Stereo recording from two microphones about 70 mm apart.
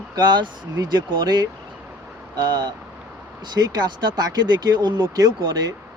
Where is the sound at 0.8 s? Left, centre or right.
Right.